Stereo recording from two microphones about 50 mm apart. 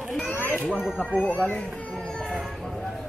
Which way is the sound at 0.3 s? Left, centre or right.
Left.